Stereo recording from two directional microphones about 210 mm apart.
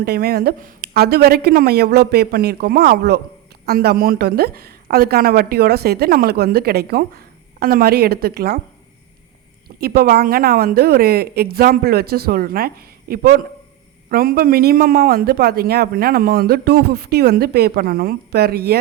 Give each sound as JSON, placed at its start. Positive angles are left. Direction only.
{"t": 0.0, "sound": "a woman's voice", "side_deg": -45}
{"t": 9.6, "sound": "a woman's voice", "side_deg": -45}